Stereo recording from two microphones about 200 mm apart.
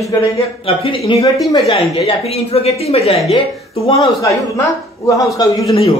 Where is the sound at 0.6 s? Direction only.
30° left (ahead or behind).